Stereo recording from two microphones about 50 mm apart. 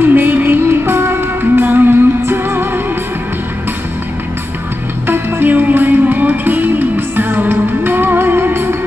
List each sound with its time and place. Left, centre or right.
0.0 s music: right
5.0 s music: right